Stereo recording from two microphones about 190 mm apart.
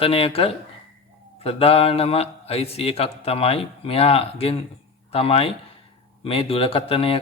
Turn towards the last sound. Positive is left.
turn(degrees=30)  # may be behind; listen again after turning